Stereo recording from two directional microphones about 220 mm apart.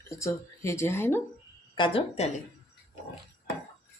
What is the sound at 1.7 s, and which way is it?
Speech, 20° left (ahead or behind).